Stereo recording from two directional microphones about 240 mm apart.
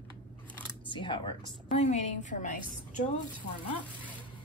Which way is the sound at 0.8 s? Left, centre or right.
Centre.